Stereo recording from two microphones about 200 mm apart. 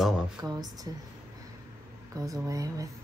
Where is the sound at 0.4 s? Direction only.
20° right (ahead or behind).